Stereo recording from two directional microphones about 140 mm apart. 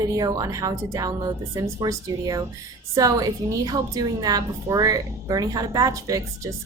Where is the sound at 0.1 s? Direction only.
25° right (ahead or behind).